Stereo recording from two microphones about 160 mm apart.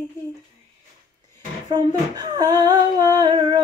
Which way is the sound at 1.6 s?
25° right (ahead or behind).